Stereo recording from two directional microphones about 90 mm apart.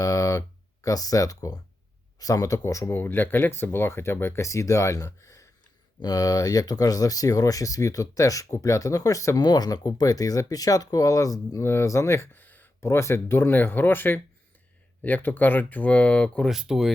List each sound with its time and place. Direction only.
0.0 s a sound: 40° left (ahead or behind)
2.1 s speech: 40° left (ahead or behind)
6.0 s speech: 45° left (ahead or behind); by 16.5 s 15° left (ahead or behind)
16.5 s speech: 5° right (ahead or behind)